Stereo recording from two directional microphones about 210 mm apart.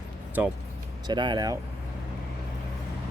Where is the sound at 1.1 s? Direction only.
20° right (ahead or behind).